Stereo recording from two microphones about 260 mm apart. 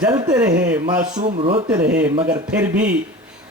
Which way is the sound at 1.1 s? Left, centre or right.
Right.